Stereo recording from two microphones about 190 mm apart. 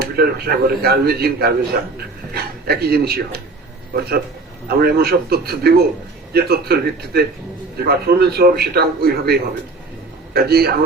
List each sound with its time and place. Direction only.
0.0 s a man's voice: 55° right (ahead or behind)
4.8 s a man's voice: 55° right (ahead or behind)